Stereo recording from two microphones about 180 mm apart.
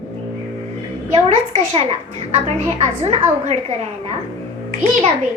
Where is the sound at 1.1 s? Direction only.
30° right (ahead or behind).